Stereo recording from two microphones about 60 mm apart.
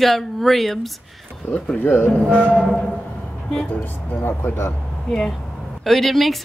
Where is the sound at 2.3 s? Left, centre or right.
Centre.